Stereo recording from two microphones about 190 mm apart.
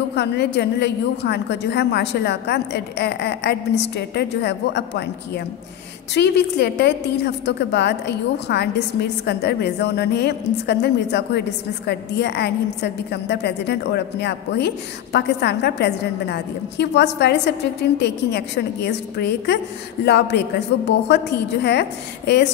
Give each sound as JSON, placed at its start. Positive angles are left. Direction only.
{"t": 0.1, "sound": "a woman's voice", "side_deg": 65}